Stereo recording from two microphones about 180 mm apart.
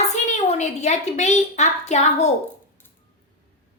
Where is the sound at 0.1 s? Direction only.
40° left (ahead or behind).